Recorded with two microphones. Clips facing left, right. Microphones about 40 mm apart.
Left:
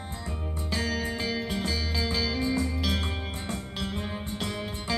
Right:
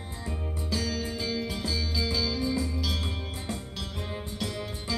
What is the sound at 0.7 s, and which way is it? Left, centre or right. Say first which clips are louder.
Music: left 2 dB; left.